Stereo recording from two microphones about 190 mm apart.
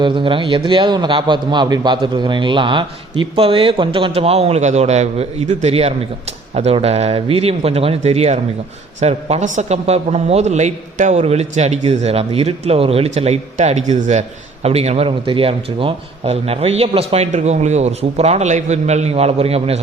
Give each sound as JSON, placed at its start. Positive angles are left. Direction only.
{"t": 0.0, "sound": "a man's voice", "side_deg": -25}